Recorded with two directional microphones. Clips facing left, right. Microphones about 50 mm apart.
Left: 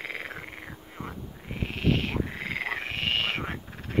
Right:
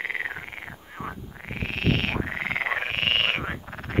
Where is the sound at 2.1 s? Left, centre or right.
Right.